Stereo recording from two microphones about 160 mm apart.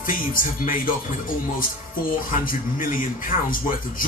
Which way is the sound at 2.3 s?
60° left (ahead or behind).